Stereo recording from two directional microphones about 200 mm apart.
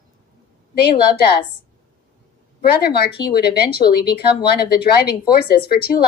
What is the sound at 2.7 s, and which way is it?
Speech, 50° left (ahead or behind).